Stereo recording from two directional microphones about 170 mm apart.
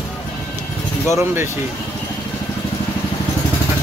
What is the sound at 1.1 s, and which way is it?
Speech, 15° right (ahead or behind).